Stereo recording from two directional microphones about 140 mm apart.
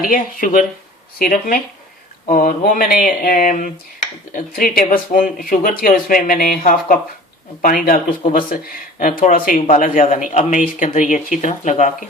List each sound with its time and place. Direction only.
0.0 s speech: 85° left
4.4 s speech: 90° left; by 12.0 s 60° left (ahead or behind)